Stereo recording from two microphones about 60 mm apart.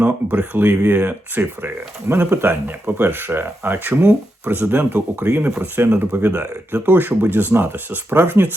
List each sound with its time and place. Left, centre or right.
0.0 s speech: right